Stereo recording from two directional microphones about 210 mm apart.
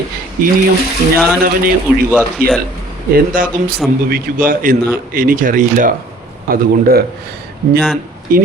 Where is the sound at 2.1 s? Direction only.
5° right (ahead or behind).